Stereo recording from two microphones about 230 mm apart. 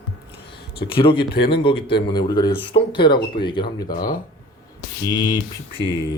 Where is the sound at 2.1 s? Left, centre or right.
Centre.